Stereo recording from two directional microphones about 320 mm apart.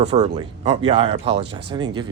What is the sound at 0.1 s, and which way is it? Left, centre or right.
Speech, centre.